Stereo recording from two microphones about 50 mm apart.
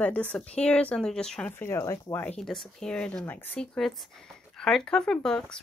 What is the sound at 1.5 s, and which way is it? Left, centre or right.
Speech, left.